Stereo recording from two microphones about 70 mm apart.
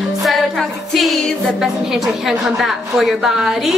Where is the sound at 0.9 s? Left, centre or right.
Centre.